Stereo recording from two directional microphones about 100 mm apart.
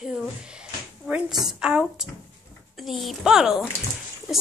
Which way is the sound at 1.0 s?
5° right (ahead or behind).